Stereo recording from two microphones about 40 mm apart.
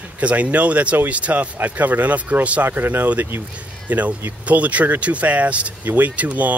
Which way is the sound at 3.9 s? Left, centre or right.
Right.